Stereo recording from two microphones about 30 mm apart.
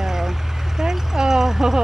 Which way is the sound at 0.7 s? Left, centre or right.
Centre.